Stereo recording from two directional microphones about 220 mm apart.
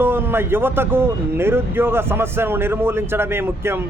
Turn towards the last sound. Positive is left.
turn(degrees=-10)  # may be behind; listen again after turning